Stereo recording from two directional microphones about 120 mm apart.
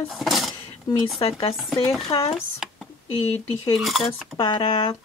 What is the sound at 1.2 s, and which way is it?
Speech, 50° left (ahead or behind).